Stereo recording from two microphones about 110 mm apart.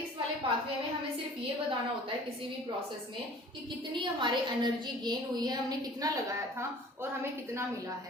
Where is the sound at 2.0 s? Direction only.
55° right (ahead or behind); by 6.6 s 35° right (ahead or behind).